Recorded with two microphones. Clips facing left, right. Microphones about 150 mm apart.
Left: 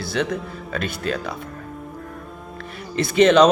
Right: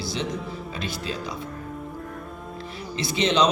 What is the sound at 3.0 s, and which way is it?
Speech, 55° left (ahead or behind).